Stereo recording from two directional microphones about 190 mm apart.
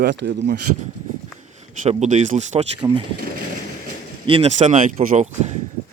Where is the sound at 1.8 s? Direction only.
35° right (ahead or behind).